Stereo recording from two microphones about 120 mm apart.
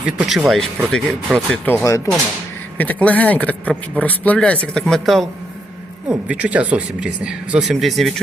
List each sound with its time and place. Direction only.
0.0 s speech: 5° right (ahead or behind)
1.6 s speech: 20° left (ahead or behind); by 5.3 s centre (ahead or behind)
6.1 s speech: 10° right (ahead or behind)